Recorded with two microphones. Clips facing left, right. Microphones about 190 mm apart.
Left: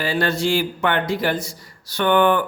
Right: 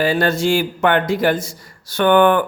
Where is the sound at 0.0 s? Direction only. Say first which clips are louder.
Right 4 dB; 45° right (ahead or behind).